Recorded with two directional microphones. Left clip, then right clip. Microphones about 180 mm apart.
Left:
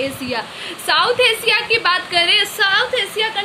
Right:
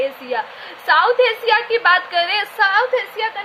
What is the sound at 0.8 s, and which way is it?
A woman's voice, 50° right (ahead or behind).